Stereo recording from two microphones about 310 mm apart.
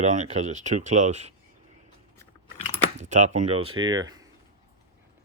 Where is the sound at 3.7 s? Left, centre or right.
Right.